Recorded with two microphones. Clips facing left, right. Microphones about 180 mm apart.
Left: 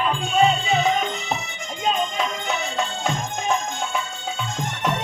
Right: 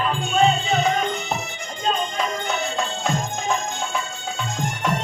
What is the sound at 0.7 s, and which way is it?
Music, centre (ahead or behind).